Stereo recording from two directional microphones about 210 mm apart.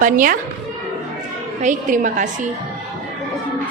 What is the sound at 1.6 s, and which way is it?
Speech, 35° right (ahead or behind).